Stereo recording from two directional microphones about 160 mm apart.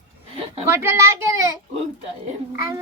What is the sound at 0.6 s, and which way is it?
Speech, 15° right (ahead or behind).